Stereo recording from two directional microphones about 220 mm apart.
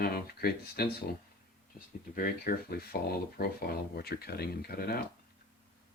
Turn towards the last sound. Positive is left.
turn(degrees=45)  # may be behind; listen again after turning